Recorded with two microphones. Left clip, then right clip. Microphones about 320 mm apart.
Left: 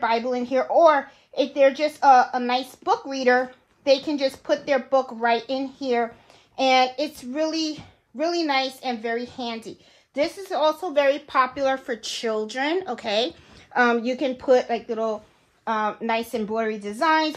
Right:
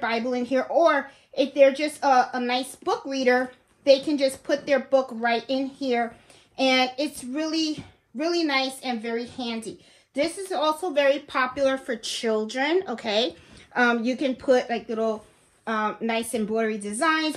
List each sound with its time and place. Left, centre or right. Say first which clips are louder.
0.0 s a woman's voice: left 3 dB; centre